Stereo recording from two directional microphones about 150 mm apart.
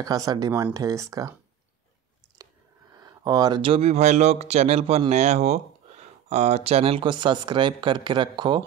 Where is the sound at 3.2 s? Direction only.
25° right (ahead or behind).